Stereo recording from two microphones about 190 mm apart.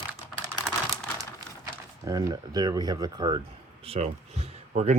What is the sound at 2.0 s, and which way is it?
Speech, 20° right (ahead or behind).